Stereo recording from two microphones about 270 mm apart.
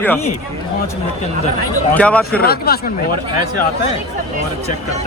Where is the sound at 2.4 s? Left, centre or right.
Left.